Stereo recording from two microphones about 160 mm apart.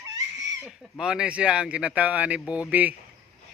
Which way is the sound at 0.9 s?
5° right (ahead or behind).